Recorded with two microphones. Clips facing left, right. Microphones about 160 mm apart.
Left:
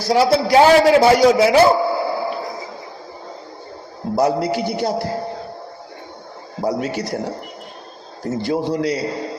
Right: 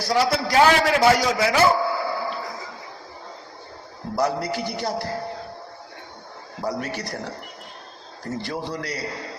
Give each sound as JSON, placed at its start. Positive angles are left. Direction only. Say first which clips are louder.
{"t": 0.1, "sound": "a man's voice", "louder": "left 7 dB", "side_deg": 30}
{"t": 4.1, "sound": "a man's voice", "louder": "left 6 dB", "side_deg": 25}
{"t": 6.8, "sound": "a man's voice", "louder": "left 7 dB", "side_deg": 25}